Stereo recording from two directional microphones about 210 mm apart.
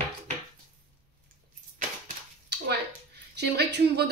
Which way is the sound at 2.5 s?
50° right (ahead or behind).